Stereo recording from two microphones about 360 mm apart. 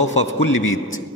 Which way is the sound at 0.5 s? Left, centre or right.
Left.